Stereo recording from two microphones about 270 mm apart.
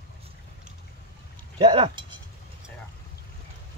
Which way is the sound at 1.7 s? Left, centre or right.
Centre.